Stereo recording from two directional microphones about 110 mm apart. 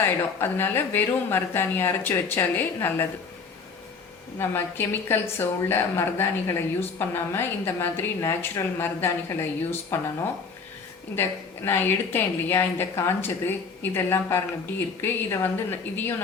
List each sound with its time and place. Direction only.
0.0 s a woman's voice: 20° left (ahead or behind)
4.4 s a woman's voice: 20° left (ahead or behind)
11.1 s a woman's voice: 20° left (ahead or behind)